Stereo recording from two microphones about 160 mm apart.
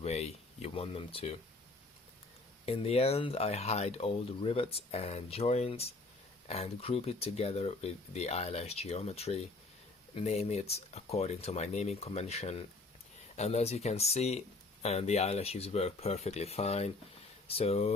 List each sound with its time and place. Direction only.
0.0 s speech: 40° left (ahead or behind)
2.6 s speech: 40° left (ahead or behind)